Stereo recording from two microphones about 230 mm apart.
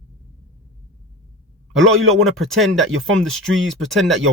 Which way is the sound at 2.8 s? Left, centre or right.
Right.